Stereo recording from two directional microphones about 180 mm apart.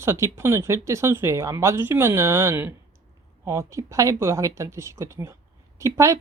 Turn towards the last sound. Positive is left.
turn(degrees=-15)  # may be behind; listen again after turning